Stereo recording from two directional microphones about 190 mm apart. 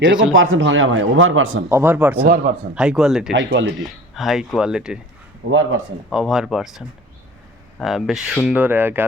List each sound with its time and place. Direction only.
0.0 s speech: 75° right (ahead or behind)
0.3 s speech: 90° right
1.7 s speech: 10° right (ahead or behind)
2.2 s a man's voice: 45° right (ahead or behind)
2.7 s speech: centre (ahead or behind)
3.3 s speech: 70° right (ahead or behind)
4.1 s speech: centre (ahead or behind)
5.5 s speech: 90° right
6.1 s speech: centre (ahead or behind)